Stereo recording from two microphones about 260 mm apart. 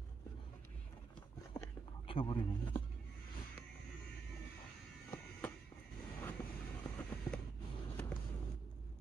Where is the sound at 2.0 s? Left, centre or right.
Centre.